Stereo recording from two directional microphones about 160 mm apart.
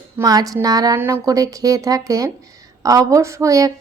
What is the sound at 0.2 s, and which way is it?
A woman's voice, 25° right (ahead or behind).